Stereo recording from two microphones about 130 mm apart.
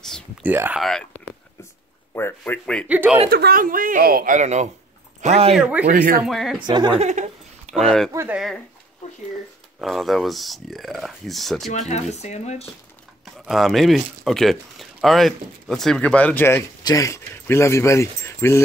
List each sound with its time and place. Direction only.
0.4 s speech: 15° right (ahead or behind)
0.7 s speech: centre (ahead or behind)
2.1 s speech: 15° left (ahead or behind)
2.9 s speech: 10° right (ahead or behind)
3.5 s speech: 90° right; by 5.6 s 55° right (ahead or behind)
5.6 s speech: 10° right (ahead or behind)
6.2 s speech: centre (ahead or behind)
6.6 s a woman's voice: 35° right (ahead or behind)
7.0 s a sound: 65° right (ahead or behind)
7.7 s speech: 5° left (ahead or behind)
9.0 s speech: 65° left (ahead or behind)
9.8 s speech: centre (ahead or behind)
11.9 s speech: 60° left (ahead or behind)
13.2 s speech: centre (ahead or behind); by 18.6 s 20° left (ahead or behind)